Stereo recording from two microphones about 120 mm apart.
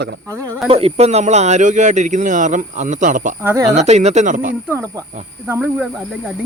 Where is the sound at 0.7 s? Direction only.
55° right (ahead or behind); by 3.3 s 90° right.